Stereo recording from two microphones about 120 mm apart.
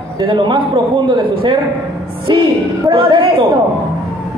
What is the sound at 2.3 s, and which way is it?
Speech, 40° right (ahead or behind).